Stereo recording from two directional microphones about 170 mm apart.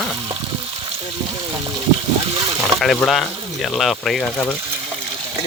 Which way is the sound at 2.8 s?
Centre (ahead or behind).